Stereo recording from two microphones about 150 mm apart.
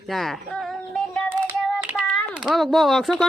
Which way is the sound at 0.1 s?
Centre (ahead or behind).